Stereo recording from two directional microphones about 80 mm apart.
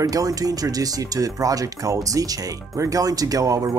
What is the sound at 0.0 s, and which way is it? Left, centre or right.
Speech, right.